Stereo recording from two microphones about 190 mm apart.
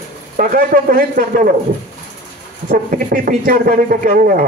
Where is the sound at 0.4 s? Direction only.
45° right (ahead or behind).